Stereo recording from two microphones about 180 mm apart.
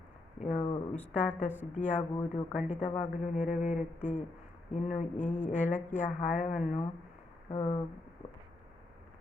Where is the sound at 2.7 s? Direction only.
40° left (ahead or behind).